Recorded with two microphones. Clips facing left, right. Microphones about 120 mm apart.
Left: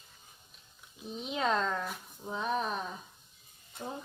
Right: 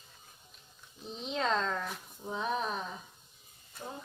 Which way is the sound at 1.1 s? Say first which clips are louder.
Left 1 dB; 5° left (ahead or behind).